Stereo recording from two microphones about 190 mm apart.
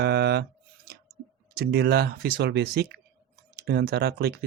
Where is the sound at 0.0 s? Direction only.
60° right (ahead or behind).